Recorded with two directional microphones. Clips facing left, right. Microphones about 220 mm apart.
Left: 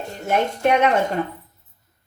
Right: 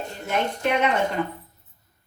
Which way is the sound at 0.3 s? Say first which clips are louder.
Left 5 dB; 50° left (ahead or behind).